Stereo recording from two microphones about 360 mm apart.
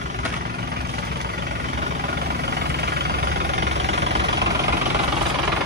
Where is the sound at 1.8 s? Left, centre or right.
Right.